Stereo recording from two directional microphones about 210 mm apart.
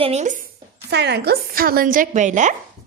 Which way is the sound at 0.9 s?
55° right (ahead or behind).